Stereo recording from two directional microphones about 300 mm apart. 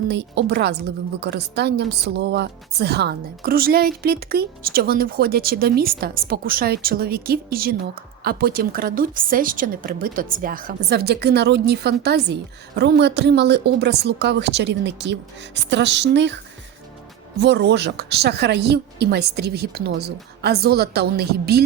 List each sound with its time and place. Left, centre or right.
0.1 s a woman's voice: right
17.4 s a woman's voice: right